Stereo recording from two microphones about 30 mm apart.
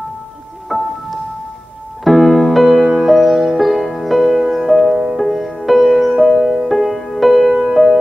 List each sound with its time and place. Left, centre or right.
0.7 s music: centre
2.0 s music: centre
6.4 s music: right
6.7 s music: centre